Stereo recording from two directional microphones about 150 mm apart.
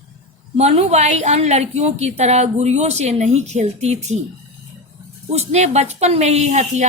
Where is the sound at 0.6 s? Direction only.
45° right (ahead or behind).